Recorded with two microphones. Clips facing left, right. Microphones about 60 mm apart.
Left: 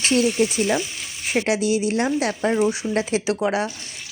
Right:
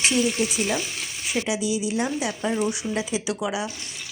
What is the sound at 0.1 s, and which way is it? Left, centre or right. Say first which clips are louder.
Speech: left 4 dB; left.